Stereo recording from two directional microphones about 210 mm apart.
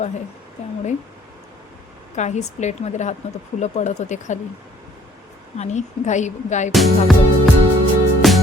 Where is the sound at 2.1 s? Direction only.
35° left (ahead or behind).